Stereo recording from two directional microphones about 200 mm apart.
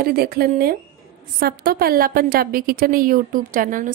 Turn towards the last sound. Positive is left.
turn(degrees=-45)  # may be behind; listen again after turning